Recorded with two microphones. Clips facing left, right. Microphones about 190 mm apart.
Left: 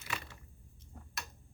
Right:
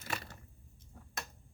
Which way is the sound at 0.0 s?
40° right (ahead or behind).